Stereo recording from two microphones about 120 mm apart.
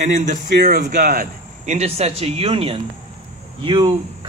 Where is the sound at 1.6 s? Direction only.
70° right (ahead or behind).